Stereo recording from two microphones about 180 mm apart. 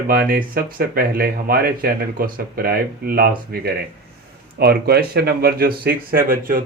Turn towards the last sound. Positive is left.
turn(degrees=-50)  # may be behind; listen again after turning